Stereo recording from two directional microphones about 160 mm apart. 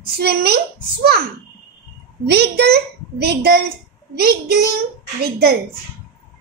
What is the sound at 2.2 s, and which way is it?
A child's voice, 90° right.